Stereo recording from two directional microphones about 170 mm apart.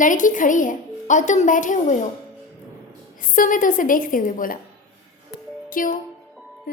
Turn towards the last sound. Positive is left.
turn(degrees=55)  # may be behind; listen again after turning